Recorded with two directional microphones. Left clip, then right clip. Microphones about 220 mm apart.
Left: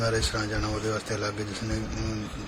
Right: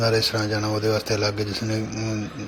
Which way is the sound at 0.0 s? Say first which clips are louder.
Right 6 dB; 25° right (ahead or behind).